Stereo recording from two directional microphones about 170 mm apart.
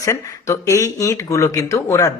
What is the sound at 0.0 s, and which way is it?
Speech, 20° left (ahead or behind).